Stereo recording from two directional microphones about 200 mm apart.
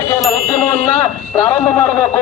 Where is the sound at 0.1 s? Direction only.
15° left (ahead or behind).